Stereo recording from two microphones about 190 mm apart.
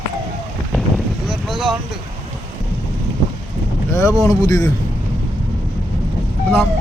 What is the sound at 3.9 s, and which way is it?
Speech, 15° left (ahead or behind).